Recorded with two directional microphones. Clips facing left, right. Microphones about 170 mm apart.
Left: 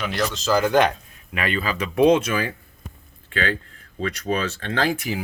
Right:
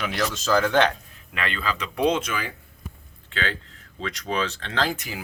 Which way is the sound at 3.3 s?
50° left (ahead or behind).